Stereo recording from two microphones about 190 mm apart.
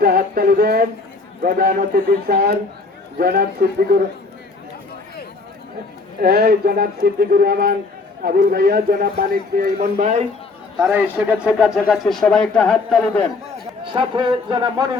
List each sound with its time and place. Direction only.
0.0 s a man's voice: 55° right (ahead or behind)
6.2 s a man's voice: 55° right (ahead or behind); by 10.2 s 35° right (ahead or behind)
10.8 s speech: 5° right (ahead or behind)
13.8 s a man's voice: 25° right (ahead or behind)